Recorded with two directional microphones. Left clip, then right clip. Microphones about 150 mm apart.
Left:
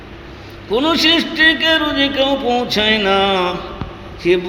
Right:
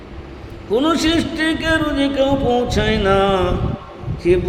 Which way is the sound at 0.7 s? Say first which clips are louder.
Left 3 dB; 15° right (ahead or behind).